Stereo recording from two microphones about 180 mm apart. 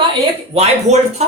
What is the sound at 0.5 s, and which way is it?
Speech, 40° right (ahead or behind).